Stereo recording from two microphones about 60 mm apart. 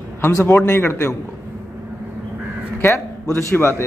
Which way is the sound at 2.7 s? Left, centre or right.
Left.